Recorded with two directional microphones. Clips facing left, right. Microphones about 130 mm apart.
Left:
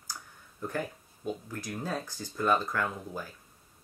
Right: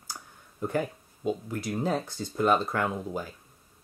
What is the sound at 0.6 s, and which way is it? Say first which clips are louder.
Speech: right 5 dB; 20° right (ahead or behind).